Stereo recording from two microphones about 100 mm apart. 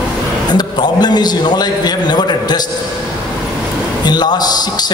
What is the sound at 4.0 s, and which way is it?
Speech, 45° left (ahead or behind).